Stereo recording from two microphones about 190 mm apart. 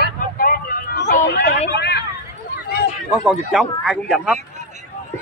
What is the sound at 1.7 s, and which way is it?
Hubbub, 60° left (ahead or behind).